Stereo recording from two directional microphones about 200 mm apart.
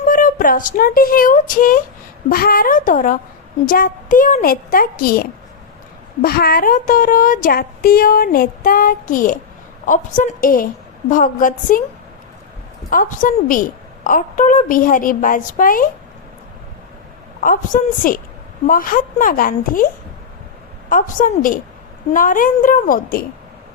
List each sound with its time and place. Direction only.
0.0 s a woman's voice: 40° left (ahead or behind)
12.9 s a woman's voice: 40° left (ahead or behind)
17.4 s speech: 45° left (ahead or behind)
20.9 s speech: 40° left (ahead or behind)